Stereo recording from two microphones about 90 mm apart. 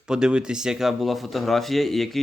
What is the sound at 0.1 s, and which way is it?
Speech, 10° right (ahead or behind).